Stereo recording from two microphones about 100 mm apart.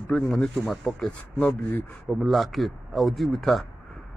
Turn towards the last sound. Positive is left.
turn(degrees=0)  # may be behind; listen again after turning